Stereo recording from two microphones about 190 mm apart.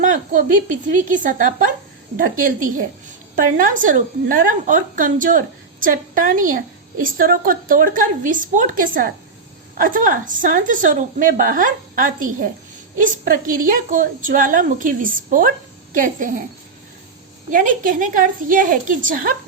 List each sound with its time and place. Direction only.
0.0 s a woman's voice: 40° right (ahead or behind)
17.5 s a woman's voice: 45° right (ahead or behind)